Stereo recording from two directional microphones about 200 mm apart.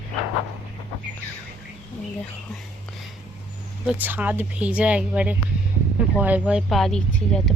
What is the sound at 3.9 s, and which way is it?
Speech, 10° right (ahead or behind).